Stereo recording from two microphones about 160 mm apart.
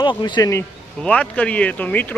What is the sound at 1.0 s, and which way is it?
Speech, 10° left (ahead or behind).